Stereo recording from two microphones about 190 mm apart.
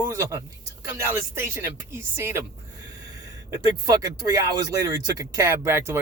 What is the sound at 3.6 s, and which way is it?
Speech, 20° right (ahead or behind).